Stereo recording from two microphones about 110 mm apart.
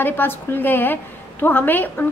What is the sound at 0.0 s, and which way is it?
A woman's voice, 20° left (ahead or behind).